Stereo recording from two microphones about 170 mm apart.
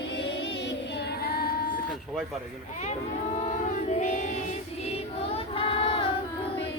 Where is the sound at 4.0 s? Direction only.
45° left (ahead or behind).